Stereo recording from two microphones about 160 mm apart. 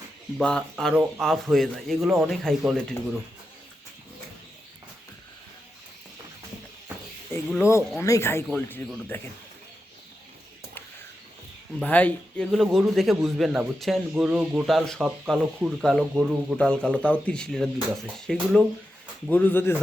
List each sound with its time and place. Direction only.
0.3 s a man's voice: 5° left (ahead or behind)
7.6 s speech: 20° left (ahead or behind)
11.8 s a man's voice: 10° left (ahead or behind)
16.6 s a man's voice: 5° left (ahead or behind)